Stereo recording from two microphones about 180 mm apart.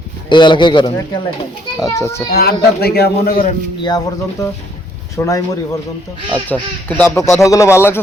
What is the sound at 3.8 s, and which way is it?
A man's voice, 20° left (ahead or behind).